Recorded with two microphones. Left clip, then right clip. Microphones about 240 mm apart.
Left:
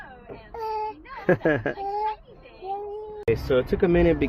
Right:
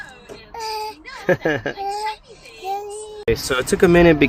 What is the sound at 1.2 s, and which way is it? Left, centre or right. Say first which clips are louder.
Speech: right 3 dB; centre.